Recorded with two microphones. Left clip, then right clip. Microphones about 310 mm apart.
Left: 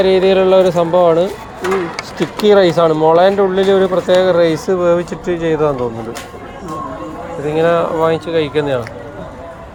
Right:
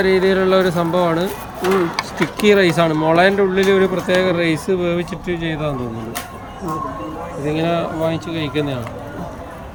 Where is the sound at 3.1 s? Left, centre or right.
Centre.